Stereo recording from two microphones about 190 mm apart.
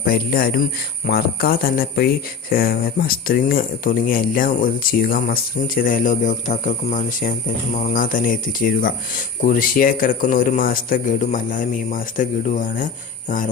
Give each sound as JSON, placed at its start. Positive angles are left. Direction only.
{"t": 0.0, "sound": "speech", "side_deg": 50}